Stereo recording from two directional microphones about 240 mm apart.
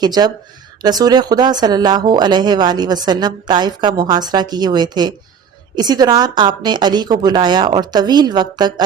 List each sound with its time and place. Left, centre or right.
0.0 s speech: centre